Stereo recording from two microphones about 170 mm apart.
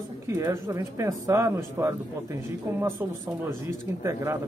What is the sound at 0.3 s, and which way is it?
Speech, 20° right (ahead or behind).